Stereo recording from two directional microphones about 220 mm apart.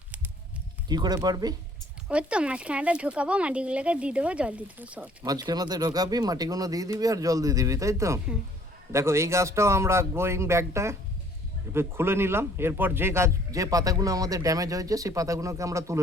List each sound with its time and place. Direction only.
0.9 s speech: 20° right (ahead or behind)
2.0 s speech: 5° right (ahead or behind)
5.2 s speech: 15° right (ahead or behind)